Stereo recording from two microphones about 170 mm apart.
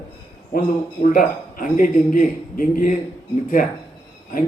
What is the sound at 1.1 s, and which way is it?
A man's voice, 50° left (ahead or behind).